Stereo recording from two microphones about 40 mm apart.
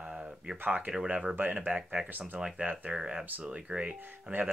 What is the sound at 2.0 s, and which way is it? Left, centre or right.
Speech, right.